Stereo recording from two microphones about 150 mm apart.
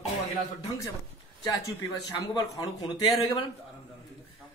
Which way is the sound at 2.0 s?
25° left (ahead or behind).